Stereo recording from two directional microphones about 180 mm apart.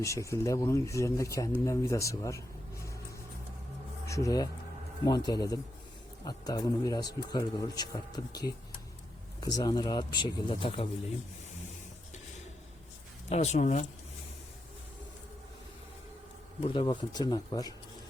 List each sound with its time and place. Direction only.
0.0 s speech: 15° left (ahead or behind)
4.0 s a man's voice: 15° left (ahead or behind)
13.3 s speech: 35° left (ahead or behind)
16.6 s a man's voice: 25° left (ahead or behind)